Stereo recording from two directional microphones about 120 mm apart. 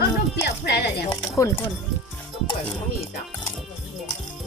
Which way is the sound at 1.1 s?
25° left (ahead or behind).